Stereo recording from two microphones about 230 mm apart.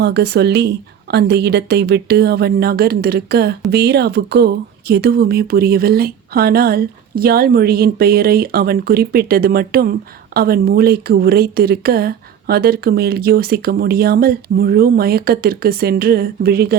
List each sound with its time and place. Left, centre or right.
0.0 s a woman's voice: right